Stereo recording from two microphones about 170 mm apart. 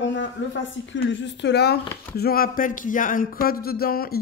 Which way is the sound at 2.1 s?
60° left (ahead or behind).